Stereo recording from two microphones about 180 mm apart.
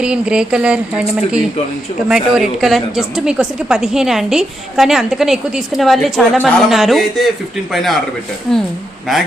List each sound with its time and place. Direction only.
0.0 s a woman's voice: 5° right (ahead or behind)